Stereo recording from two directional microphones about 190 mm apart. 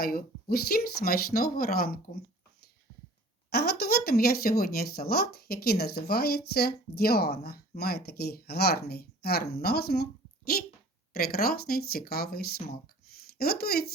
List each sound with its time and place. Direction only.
0.0 s speech: 50° left (ahead or behind)
3.5 s speech: 55° left (ahead or behind)